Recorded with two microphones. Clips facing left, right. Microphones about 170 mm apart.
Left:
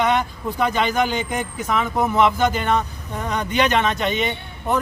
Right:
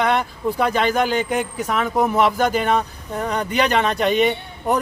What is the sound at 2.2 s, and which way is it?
Speech, 40° right (ahead or behind).